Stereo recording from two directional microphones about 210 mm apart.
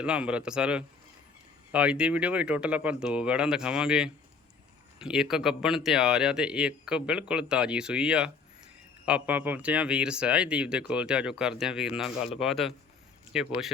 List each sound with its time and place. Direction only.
0.0 s speech: 5° right (ahead or behind)